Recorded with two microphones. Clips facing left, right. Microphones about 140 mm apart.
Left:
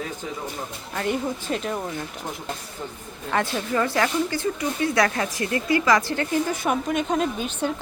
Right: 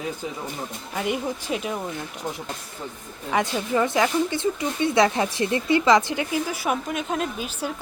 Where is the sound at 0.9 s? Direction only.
10° right (ahead or behind).